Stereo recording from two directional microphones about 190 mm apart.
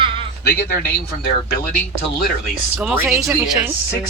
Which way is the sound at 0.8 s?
55° left (ahead or behind).